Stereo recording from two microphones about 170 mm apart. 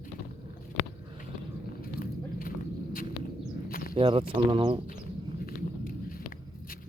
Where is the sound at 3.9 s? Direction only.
30° right (ahead or behind).